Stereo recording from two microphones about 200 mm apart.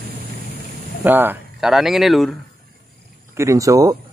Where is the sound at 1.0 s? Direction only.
10° right (ahead or behind).